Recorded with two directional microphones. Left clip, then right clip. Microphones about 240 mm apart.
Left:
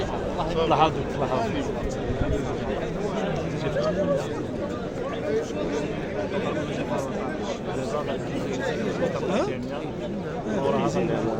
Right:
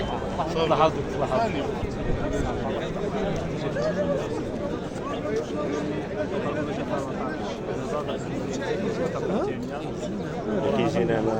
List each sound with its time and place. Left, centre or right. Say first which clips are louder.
0.7 s a man's voice: even; left
10.8 s a man's voice: even; right